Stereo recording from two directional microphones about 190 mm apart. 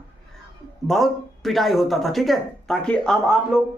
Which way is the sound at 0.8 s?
Centre (ahead or behind).